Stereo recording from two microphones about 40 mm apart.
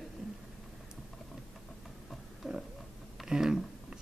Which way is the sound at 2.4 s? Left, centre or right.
Centre.